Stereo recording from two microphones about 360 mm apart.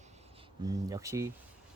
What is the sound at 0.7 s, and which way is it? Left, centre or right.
Speech, centre.